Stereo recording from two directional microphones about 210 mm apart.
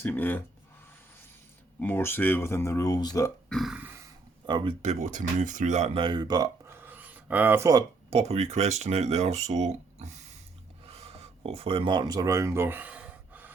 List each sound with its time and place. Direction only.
0.0 s speech: 10° left (ahead or behind)
1.8 s speech: 10° left (ahead or behind)
3.5 s burping: centre (ahead or behind)
4.4 s speech: 25° right (ahead or behind)
8.1 s speech: 30° right (ahead or behind)
10.8 s a sound: 30° right (ahead or behind); by 13.5 s 5° right (ahead or behind)